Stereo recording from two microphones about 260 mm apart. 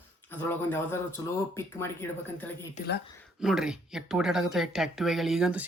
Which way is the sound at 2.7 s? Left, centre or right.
Left.